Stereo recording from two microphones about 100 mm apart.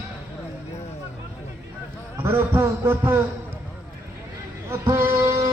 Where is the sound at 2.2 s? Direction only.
25° right (ahead or behind).